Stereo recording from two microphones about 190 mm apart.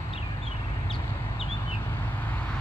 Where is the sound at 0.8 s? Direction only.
30° left (ahead or behind).